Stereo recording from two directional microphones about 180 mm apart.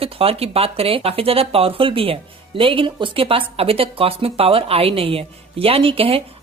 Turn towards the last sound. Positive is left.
turn(degrees=-30)  # may be behind; listen again after turning